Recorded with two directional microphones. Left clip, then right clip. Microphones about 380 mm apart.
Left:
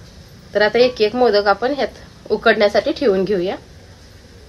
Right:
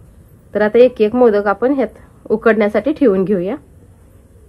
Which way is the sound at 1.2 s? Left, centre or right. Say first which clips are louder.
Right 2 dB; right.